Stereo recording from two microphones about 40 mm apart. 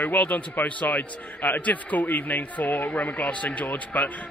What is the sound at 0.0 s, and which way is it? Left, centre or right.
Speech, left.